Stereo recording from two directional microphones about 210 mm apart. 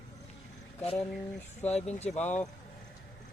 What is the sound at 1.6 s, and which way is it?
Speech, 30° left (ahead or behind).